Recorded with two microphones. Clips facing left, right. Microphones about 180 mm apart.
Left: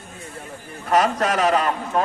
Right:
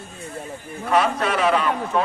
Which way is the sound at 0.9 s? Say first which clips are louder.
Left 1 dB; 40° left (ahead or behind).